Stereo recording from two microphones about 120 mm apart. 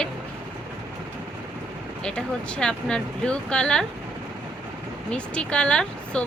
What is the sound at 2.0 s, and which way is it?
Speech, 5° left (ahead or behind).